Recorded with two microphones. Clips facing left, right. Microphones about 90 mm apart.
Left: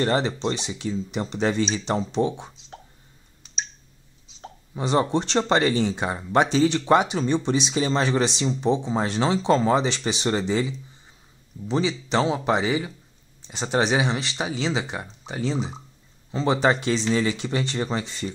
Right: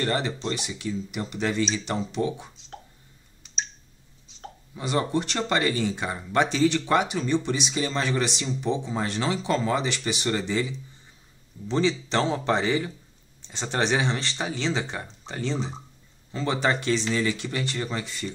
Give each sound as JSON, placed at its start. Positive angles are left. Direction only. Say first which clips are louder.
{"t": 0.0, "sound": "speech", "louder": "left 4 dB", "side_deg": 25}
{"t": 4.7, "sound": "speech", "louder": "left 4 dB", "side_deg": 25}
{"t": 11.6, "sound": "speech", "louder": "even", "side_deg": 5}
{"t": 16.3, "sound": "a sound", "louder": "left 5 dB", "side_deg": 20}
{"t": 16.6, "sound": "speech", "louder": "left 1 dB", "side_deg": 20}